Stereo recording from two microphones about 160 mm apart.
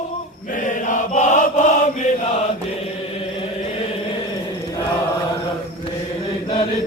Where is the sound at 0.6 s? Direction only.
50° left (ahead or behind).